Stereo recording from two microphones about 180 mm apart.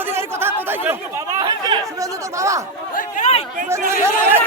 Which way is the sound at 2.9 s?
40° left (ahead or behind).